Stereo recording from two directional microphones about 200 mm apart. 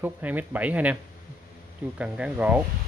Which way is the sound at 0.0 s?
10° right (ahead or behind).